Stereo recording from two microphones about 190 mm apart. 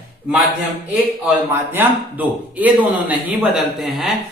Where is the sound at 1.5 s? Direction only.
10° right (ahead or behind).